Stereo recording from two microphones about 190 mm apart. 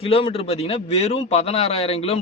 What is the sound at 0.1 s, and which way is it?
Speech, 30° left (ahead or behind).